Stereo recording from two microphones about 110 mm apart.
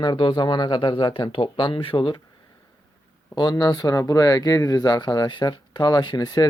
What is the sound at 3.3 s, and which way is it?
Speech, 40° left (ahead or behind).